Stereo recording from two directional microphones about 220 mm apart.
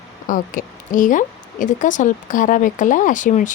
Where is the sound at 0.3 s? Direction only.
35° left (ahead or behind).